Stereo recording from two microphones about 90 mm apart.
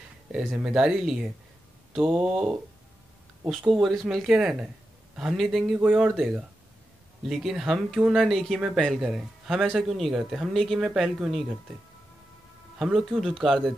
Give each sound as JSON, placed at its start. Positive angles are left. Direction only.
{"t": 0.6, "sound": "speech", "side_deg": -10}
{"t": 2.0, "sound": "speech", "side_deg": -20}
{"t": 3.4, "sound": "speech", "side_deg": 0}
{"t": 12.7, "sound": "speech", "side_deg": -5}